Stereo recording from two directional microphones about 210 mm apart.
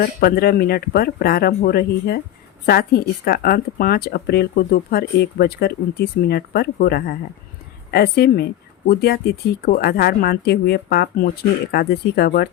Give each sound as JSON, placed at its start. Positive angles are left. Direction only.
{"t": 0.0, "sound": "speech", "side_deg": 45}